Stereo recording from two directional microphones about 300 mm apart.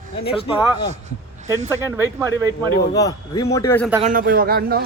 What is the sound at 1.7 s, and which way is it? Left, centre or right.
Speech, centre.